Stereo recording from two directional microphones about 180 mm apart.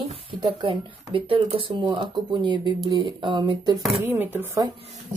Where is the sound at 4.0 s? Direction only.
10° right (ahead or behind).